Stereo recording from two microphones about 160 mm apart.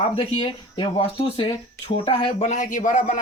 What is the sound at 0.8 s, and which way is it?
Speech, 35° left (ahead or behind).